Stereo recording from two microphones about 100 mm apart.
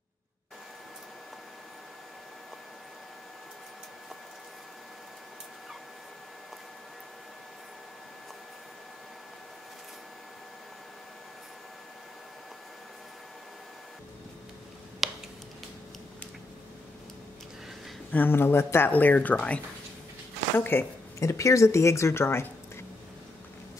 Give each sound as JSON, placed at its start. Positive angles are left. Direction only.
{"t": 15.0, "sound": "a sound", "side_deg": 0}
{"t": 18.1, "sound": "speech", "side_deg": 20}
{"t": 21.2, "sound": "speech", "side_deg": 30}